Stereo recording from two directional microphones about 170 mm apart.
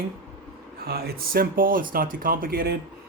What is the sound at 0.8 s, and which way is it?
Speech, 65° right (ahead or behind).